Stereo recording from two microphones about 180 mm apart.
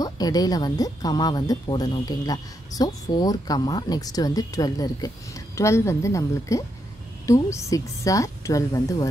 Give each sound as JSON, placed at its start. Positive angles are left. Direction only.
{"t": 0.0, "sound": "a woman's voice", "side_deg": 20}